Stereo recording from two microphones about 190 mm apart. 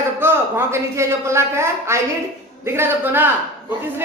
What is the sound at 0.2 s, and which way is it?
Speech, 10° right (ahead or behind).